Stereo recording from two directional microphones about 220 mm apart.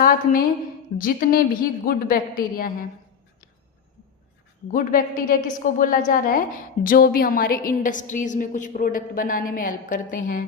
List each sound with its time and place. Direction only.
0.0 s a woman's voice: 40° left (ahead or behind)
4.7 s a woman's voice: 40° left (ahead or behind)